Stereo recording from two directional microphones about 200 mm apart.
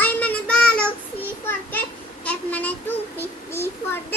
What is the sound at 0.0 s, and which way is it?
Child singing, 5° left (ahead or behind).